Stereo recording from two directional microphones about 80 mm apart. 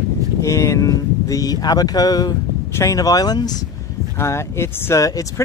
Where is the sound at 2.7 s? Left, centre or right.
Left.